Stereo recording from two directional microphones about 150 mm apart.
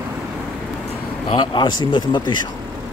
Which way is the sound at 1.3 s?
30° left (ahead or behind).